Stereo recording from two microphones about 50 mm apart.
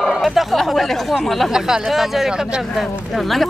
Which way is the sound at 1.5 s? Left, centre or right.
Centre.